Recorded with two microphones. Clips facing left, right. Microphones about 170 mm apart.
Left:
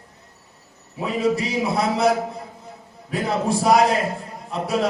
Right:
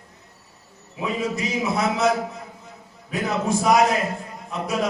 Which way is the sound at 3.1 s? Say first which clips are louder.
Left 1 dB; 30° left (ahead or behind).